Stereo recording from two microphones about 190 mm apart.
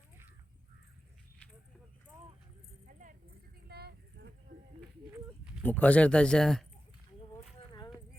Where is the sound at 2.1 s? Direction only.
10° right (ahead or behind).